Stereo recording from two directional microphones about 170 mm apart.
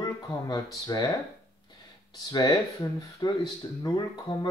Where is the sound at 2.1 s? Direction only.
20° left (ahead or behind).